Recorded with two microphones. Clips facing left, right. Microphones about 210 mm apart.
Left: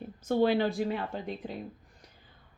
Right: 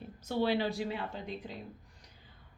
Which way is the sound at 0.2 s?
50° left (ahead or behind).